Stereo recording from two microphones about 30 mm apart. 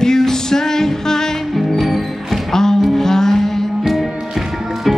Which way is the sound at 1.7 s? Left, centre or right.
Centre.